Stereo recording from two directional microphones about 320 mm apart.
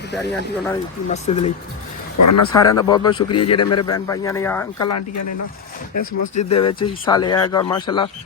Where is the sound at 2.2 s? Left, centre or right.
Left.